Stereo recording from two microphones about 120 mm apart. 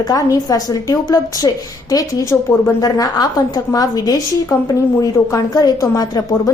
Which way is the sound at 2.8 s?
30° left (ahead or behind).